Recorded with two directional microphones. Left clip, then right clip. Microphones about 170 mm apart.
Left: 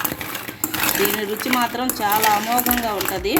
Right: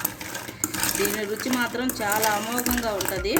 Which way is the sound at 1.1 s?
20° left (ahead or behind).